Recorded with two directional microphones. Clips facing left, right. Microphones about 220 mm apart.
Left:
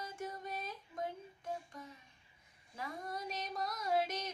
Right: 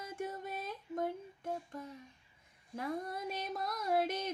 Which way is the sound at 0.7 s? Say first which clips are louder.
Right 6 dB; 55° right (ahead or behind).